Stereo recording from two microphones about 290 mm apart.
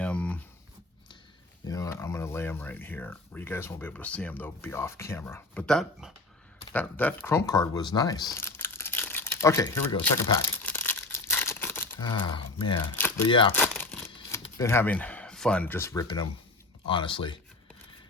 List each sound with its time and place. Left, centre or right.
0.0 s a sound: centre
1.6 s speech: centre
10.2 s tearing: centre
13.0 s speech: centre
13.6 s crumpling: centre
14.1 s speech: centre